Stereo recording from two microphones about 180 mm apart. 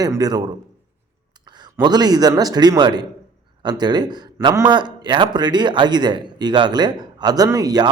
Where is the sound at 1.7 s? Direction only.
20° right (ahead or behind).